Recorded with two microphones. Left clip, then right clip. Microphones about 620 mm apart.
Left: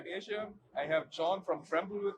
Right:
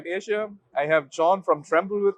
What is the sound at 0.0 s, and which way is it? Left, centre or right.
Speech, right.